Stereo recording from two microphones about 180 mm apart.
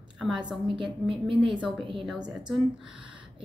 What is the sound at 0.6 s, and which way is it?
Speech, 25° right (ahead or behind).